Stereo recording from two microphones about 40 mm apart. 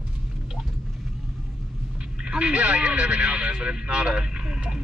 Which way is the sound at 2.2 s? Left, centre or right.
Right.